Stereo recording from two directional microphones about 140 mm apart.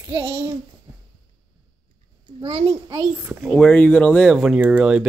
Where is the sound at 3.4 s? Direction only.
10° left (ahead or behind); by 5.0 s 10° right (ahead or behind).